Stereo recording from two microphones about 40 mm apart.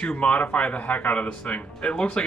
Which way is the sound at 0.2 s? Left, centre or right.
Left.